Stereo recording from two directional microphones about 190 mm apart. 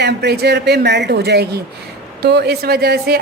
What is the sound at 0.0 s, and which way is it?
A woman's voice, 60° right (ahead or behind).